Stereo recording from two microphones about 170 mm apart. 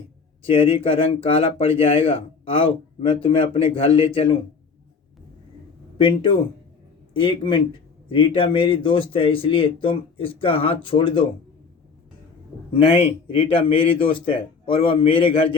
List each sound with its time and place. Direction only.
0.4 s a man's voice: 30° left (ahead or behind)
6.0 s a man's voice: 30° left (ahead or behind)
12.7 s a man's voice: 30° left (ahead or behind)